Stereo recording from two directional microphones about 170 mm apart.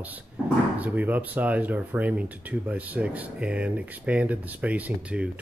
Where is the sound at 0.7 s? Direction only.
10° right (ahead or behind).